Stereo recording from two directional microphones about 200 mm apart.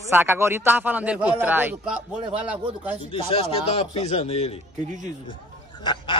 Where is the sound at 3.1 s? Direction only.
25° left (ahead or behind).